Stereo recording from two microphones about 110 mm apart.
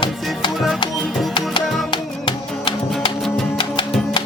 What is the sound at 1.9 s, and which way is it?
Music, 50° left (ahead or behind).